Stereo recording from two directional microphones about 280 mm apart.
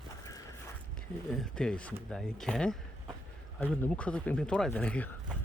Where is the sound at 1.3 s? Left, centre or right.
Centre.